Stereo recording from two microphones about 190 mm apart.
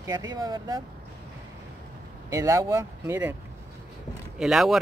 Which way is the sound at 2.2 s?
15° right (ahead or behind).